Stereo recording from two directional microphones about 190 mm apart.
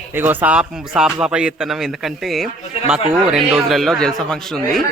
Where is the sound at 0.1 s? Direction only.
10° right (ahead or behind).